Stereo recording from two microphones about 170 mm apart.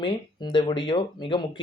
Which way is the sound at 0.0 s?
25° left (ahead or behind).